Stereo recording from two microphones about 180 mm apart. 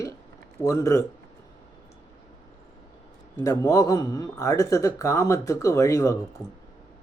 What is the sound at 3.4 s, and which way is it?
Speech, 20° left (ahead or behind).